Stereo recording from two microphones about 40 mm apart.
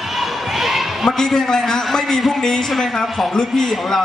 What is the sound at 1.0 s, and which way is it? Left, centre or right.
A man's voice, centre.